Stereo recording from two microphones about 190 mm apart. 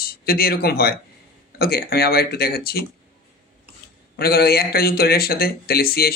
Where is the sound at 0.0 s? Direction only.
50° left (ahead or behind).